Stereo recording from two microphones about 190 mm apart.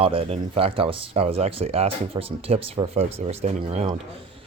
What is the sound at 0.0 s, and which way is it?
Speech, 30° right (ahead or behind).